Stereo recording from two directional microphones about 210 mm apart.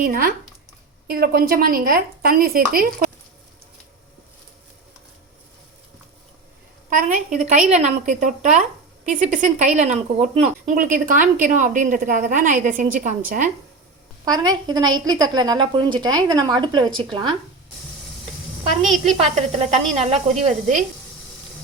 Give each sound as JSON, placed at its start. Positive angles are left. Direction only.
{"t": 0.0, "sound": "speech", "side_deg": -45}
{"t": 6.9, "sound": "speech", "side_deg": -40}
{"t": 14.3, "sound": "a woman's voice", "side_deg": -20}
{"t": 19.2, "sound": "speech", "side_deg": -30}